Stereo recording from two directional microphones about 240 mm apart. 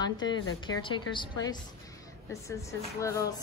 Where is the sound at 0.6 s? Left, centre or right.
Centre.